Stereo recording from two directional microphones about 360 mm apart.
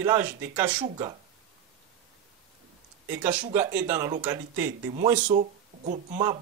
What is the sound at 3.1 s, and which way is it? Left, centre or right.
Speech, centre.